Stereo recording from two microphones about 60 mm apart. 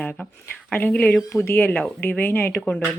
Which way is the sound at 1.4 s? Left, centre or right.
Left.